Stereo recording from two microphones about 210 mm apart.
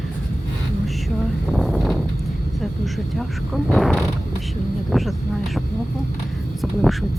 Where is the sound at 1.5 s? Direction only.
Centre (ahead or behind).